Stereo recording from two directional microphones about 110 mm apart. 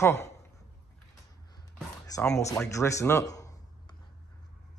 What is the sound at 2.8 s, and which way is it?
Speech, 25° left (ahead or behind).